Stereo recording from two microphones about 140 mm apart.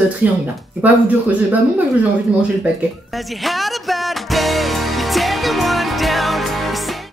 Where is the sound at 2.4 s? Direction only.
5° right (ahead or behind).